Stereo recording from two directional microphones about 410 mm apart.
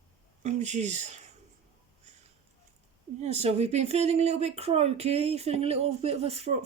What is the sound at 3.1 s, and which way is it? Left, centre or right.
Speech, centre.